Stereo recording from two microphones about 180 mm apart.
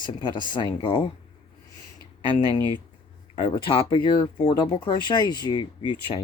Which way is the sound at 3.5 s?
30° left (ahead or behind).